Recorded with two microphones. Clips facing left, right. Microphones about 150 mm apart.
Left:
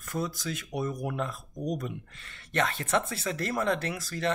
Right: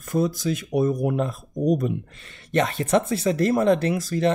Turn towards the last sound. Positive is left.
turn(degrees=-20)  # may be behind; listen again after turning